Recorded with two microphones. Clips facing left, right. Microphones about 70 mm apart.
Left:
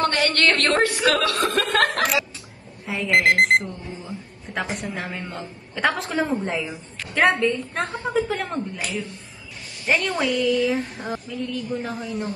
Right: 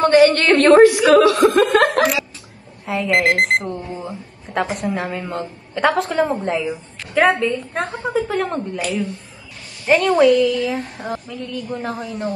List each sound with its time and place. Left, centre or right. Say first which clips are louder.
0.0 s a sound: right 8 dB; centre
0.8 s a man's voice: right 9 dB; centre
1.1 s a woman's voice: right 10 dB; centre